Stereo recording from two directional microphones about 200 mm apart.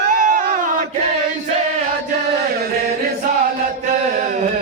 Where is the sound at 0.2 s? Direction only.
40° right (ahead or behind).